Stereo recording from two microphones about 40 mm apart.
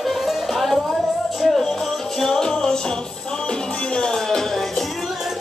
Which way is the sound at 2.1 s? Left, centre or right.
Centre.